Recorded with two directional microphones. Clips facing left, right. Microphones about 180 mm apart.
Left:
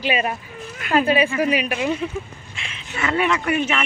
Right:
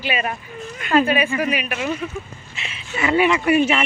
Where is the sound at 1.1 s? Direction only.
30° left (ahead or behind).